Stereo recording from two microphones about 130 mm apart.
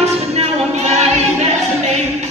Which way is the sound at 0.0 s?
55° right (ahead or behind).